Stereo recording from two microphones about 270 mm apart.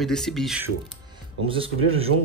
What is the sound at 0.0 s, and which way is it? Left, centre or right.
Speech, centre.